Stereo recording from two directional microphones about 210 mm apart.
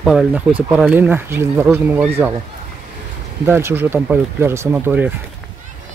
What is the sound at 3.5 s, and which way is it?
Speech, 10° right (ahead or behind).